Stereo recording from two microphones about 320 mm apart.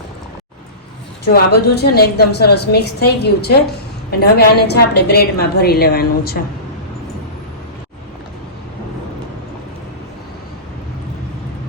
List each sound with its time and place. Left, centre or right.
1.2 s a woman's voice: left